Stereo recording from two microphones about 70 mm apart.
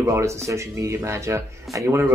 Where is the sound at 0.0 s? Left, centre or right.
Right.